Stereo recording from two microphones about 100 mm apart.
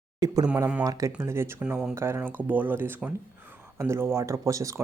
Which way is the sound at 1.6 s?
10° right (ahead or behind).